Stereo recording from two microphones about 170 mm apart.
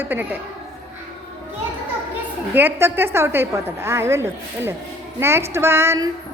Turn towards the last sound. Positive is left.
turn(degrees=-15)  # may be behind; listen again after turning